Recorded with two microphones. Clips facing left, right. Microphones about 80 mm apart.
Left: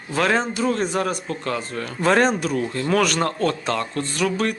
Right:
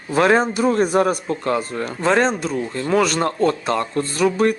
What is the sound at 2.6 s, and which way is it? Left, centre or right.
Speech, centre.